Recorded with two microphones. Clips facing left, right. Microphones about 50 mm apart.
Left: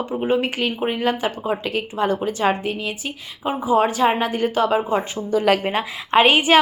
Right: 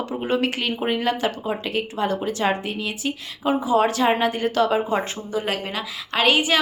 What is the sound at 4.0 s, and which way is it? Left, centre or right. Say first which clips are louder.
Speech: left 1 dB; left.